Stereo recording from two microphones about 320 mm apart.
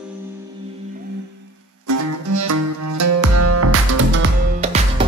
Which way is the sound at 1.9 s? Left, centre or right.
Right.